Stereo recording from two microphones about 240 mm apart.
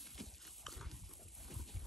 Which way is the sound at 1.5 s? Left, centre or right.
Centre.